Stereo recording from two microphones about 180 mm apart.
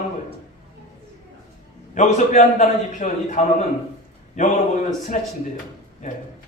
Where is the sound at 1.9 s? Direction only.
45° left (ahead or behind).